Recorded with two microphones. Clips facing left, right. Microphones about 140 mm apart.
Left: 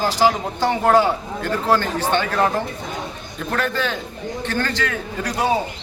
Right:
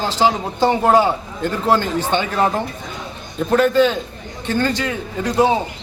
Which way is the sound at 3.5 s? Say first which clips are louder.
Right 9 dB; 15° right (ahead or behind).